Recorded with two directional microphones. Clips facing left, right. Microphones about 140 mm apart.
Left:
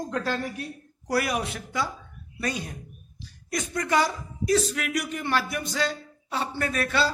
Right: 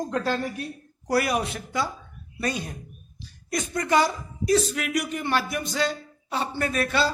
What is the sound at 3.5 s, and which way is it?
Speech, 25° right (ahead or behind).